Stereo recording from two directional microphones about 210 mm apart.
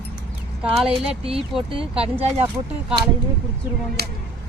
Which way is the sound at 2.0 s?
30° right (ahead or behind).